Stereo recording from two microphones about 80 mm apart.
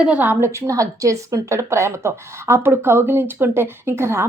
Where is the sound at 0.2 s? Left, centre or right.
Right.